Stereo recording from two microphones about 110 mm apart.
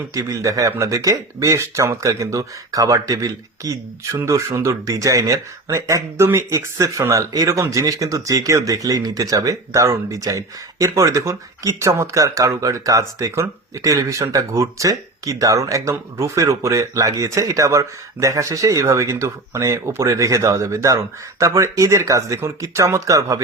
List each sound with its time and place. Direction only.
0.1 s speech: 30° right (ahead or behind)